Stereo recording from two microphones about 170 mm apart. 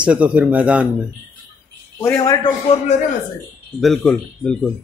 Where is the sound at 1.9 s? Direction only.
15° left (ahead or behind).